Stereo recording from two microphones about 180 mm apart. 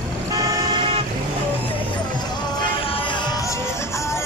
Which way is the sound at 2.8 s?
30° left (ahead or behind).